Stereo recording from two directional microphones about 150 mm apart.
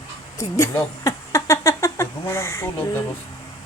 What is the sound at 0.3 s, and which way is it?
Speech, 20° left (ahead or behind).